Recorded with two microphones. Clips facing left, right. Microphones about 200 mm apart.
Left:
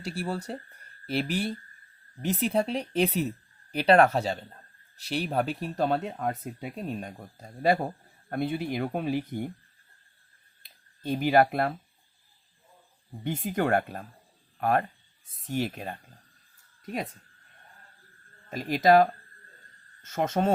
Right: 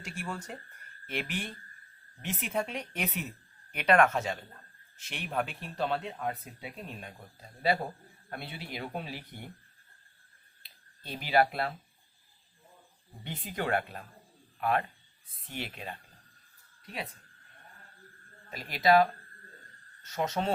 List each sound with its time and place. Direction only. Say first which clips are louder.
0.0 s speech: left 7 dB; 35° left (ahead or behind)
10.6 s a sound: left 15 dB; 45° left (ahead or behind)
13.2 s speech: left 7 dB; 50° left (ahead or behind)
18.5 s speech: left 4 dB; 45° left (ahead or behind)